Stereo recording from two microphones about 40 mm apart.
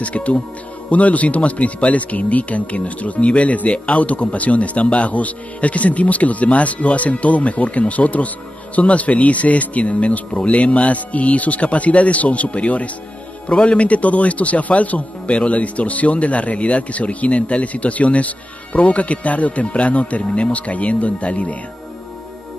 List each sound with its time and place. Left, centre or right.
0.0 s a man's voice: left